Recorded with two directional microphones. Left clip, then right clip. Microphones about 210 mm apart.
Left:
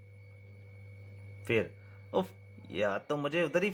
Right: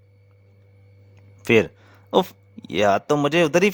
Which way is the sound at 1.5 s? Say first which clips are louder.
Right 14 dB; 60° right (ahead or behind).